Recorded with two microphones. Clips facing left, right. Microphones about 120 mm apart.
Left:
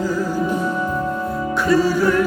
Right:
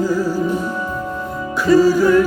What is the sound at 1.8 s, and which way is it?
Music, centre (ahead or behind).